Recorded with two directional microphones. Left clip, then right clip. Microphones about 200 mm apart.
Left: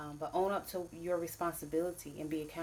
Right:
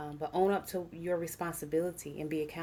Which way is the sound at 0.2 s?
55° right (ahead or behind).